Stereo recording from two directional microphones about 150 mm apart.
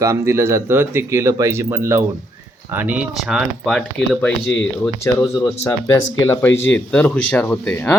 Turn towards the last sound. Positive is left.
turn(degrees=10)  # may be behind; listen again after turning